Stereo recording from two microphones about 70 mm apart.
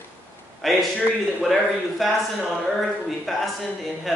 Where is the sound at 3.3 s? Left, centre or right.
Centre.